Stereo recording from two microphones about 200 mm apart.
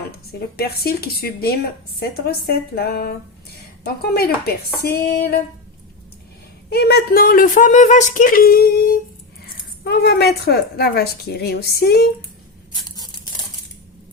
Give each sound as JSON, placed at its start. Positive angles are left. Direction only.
{"t": 0.3, "sound": "speech", "side_deg": 50}
{"t": 6.7, "sound": "speech", "side_deg": 50}